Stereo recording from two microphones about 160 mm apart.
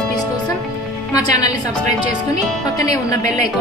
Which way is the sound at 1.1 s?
25° left (ahead or behind).